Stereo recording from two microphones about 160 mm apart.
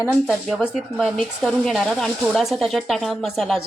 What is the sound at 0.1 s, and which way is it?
Speech, centre (ahead or behind).